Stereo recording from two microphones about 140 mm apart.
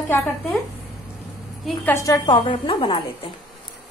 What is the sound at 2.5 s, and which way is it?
Speech, 35° left (ahead or behind).